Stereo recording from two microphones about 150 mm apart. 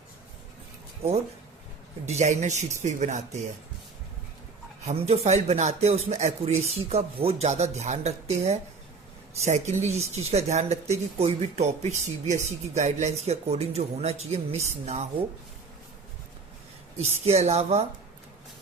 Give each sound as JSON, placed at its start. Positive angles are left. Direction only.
{"t": 2.0, "sound": "speech", "side_deg": -50}
{"t": 4.9, "sound": "speech", "side_deg": -45}
{"t": 17.0, "sound": "speech", "side_deg": -45}